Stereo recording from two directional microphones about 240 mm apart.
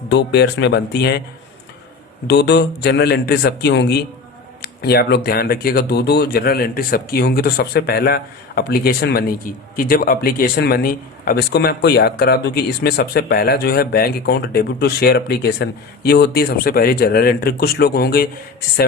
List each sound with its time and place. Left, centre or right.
0.1 s a man's voice: left
2.2 s a man's voice: left